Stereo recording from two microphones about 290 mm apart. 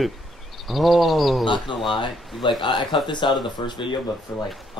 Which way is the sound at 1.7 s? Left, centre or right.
Centre.